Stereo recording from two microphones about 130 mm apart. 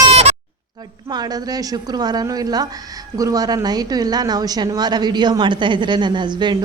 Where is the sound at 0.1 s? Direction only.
50° right (ahead or behind).